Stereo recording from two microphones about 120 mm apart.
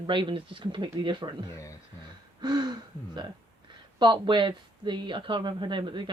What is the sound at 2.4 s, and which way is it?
Hoot, 35° right (ahead or behind).